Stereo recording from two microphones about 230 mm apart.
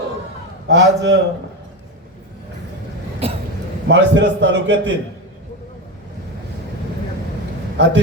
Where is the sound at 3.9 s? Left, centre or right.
Right.